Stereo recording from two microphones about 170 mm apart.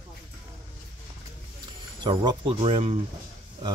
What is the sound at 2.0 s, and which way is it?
Speech, 25° right (ahead or behind).